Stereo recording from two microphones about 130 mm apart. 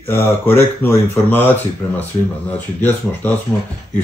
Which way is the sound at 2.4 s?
10° left (ahead or behind).